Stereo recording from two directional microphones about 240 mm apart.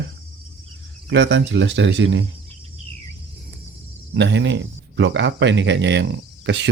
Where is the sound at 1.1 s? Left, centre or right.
Right.